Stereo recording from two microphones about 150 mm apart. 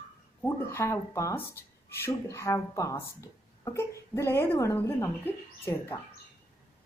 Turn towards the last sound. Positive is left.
turn(degrees=15)  # may be behind; listen again after turning